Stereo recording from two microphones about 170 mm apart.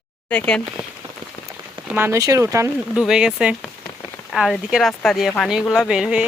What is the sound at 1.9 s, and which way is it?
Speech, 15° right (ahead or behind).